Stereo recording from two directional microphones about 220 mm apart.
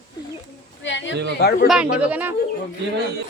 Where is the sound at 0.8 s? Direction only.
55° left (ahead or behind).